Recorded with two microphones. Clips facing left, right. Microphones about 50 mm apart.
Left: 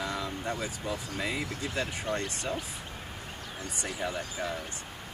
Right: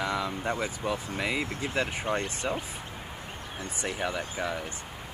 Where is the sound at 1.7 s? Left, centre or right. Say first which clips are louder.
Right 3 dB; right.